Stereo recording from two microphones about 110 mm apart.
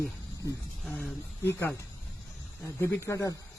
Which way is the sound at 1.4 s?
25° left (ahead or behind).